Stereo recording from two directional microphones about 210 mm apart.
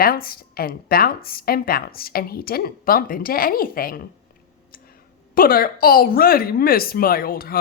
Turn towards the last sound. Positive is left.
turn(degrees=45)  # may be behind; listen again after turning